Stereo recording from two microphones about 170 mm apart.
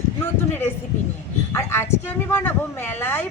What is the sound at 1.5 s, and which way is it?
A woman's voice, 15° left (ahead or behind).